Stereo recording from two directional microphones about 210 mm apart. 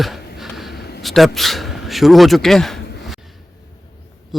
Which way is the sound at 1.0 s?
Centre (ahead or behind).